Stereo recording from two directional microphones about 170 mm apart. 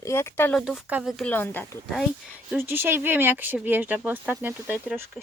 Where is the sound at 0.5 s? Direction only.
Centre (ahead or behind).